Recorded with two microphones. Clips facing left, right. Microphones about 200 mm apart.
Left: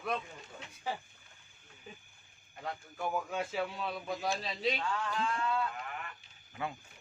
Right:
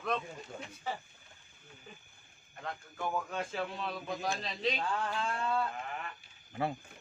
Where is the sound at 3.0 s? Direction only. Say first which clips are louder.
Left 1 dB; 5° left (ahead or behind).